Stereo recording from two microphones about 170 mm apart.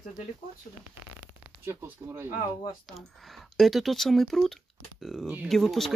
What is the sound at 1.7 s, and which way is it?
Speech, 15° right (ahead or behind).